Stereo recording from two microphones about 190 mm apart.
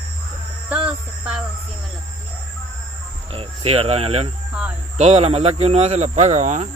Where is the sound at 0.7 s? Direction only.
5° right (ahead or behind).